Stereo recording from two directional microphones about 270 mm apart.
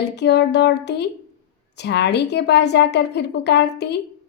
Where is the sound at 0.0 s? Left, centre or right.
Left.